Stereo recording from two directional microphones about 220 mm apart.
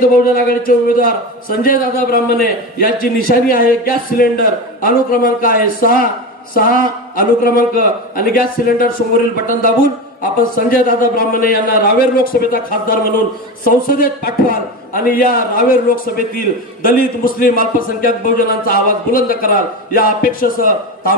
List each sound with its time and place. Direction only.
0.2 s a man's voice: 40° left (ahead or behind)